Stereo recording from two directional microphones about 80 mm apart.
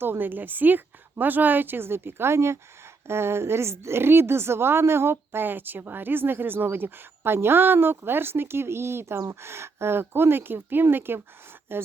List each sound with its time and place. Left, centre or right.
0.0 s a woman's voice: right